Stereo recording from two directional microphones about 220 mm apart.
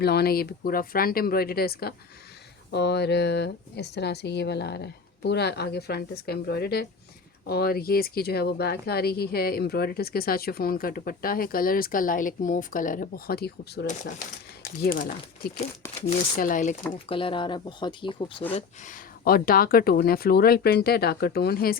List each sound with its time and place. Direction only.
0.0 s speech: 45° left (ahead or behind)
17.1 s speech: 25° left (ahead or behind)
18.5 s speech: 40° left (ahead or behind)